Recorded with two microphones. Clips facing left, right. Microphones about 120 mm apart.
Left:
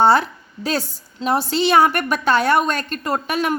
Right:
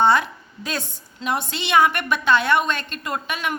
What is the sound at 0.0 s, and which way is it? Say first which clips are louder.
A woman's voice: left 3 dB; 35° left (ahead or behind).